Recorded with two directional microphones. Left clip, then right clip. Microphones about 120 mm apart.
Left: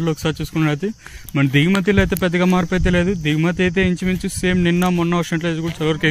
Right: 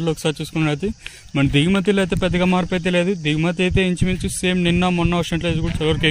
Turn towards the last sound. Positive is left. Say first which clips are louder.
# even
turn(degrees=-15)  # may be behind; listen again after turning